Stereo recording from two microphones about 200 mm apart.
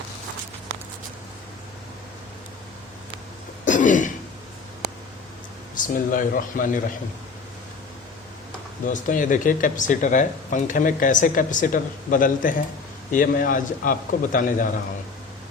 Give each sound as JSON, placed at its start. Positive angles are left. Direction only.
{"t": 3.7, "sound": "cough", "side_deg": 40}
{"t": 5.8, "sound": "a man's voice", "side_deg": 45}
{"t": 8.9, "sound": "a man's voice", "side_deg": 40}